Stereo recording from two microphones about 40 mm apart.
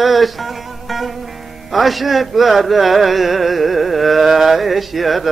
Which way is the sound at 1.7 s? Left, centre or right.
Centre.